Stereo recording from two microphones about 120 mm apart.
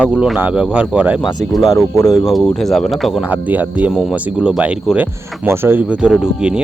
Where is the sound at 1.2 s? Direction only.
35° left (ahead or behind).